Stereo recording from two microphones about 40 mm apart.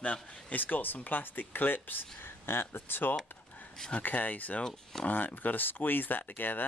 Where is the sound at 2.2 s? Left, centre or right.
Left.